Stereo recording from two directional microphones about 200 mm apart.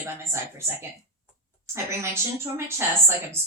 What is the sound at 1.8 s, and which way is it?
A woman's voice, 15° right (ahead or behind).